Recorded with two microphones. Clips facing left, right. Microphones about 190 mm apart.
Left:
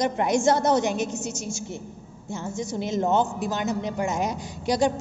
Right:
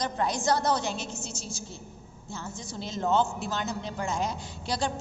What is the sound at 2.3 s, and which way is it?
A woman's voice, 20° left (ahead or behind).